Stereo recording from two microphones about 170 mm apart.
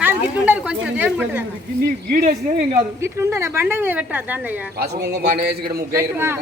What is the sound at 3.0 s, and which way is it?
A woman's voice, 15° right (ahead or behind).